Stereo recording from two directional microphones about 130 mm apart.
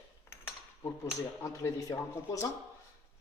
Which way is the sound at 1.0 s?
20° left (ahead or behind).